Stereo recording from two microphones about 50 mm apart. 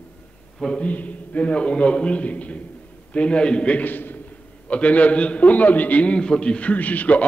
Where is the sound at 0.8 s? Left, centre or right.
Left.